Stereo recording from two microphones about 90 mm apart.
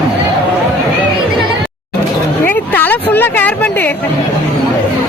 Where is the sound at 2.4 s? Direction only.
20° left (ahead or behind).